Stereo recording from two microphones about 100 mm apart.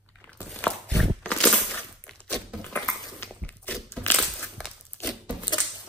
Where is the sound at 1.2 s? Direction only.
15° left (ahead or behind).